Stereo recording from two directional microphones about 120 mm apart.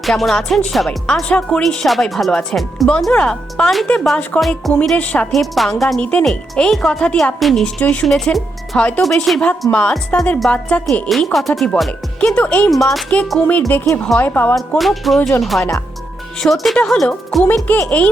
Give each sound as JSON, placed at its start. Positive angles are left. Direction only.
{"t": 0.0, "sound": "speech", "side_deg": 0}
{"t": 12.7, "sound": "speech", "side_deg": 0}
{"t": 13.6, "sound": "speech", "side_deg": 20}
{"t": 14.8, "sound": "speech", "side_deg": 0}
{"t": 17.4, "sound": "speech", "side_deg": 15}